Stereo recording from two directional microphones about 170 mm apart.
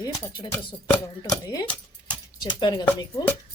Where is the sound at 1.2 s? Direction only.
20° left (ahead or behind).